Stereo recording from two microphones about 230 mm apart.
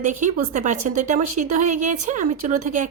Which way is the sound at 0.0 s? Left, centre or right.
Right.